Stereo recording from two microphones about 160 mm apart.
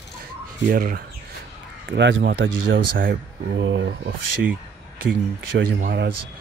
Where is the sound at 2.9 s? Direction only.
60° right (ahead or behind).